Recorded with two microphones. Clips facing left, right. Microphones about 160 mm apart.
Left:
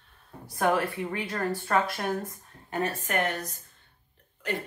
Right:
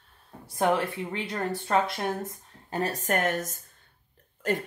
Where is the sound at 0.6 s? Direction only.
25° right (ahead or behind).